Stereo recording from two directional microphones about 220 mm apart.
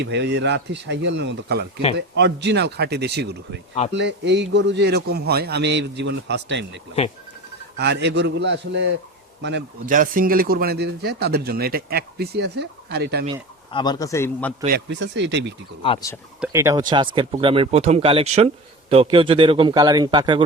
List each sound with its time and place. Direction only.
0.0 s speech: 50° right (ahead or behind)
7.0 s speech: 30° left (ahead or behind)
7.8 s speech: 50° right (ahead or behind)
9.9 s speech: 40° right (ahead or behind)
13.7 s a man's voice: 20° left (ahead or behind)
14.8 s speech: 55° right (ahead or behind)
15.8 s speech: 20° left (ahead or behind)
16.4 s speech: 15° right (ahead or behind)